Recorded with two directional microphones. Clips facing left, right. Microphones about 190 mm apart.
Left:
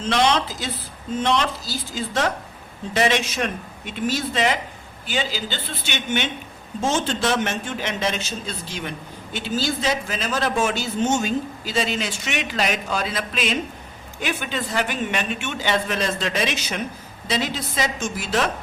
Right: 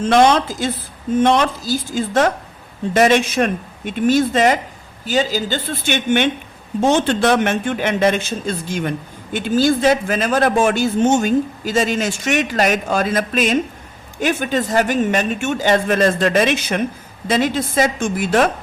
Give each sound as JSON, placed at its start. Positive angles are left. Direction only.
{"t": 0.0, "sound": "speech", "side_deg": -50}